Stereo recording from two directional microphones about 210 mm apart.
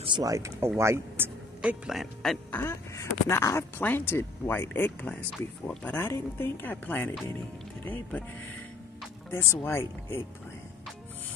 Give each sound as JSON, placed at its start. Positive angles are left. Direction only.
{"t": 0.0, "sound": "a man's voice", "side_deg": -20}
{"t": 2.6, "sound": "speech", "side_deg": 10}
{"t": 9.3, "sound": "speech", "side_deg": 10}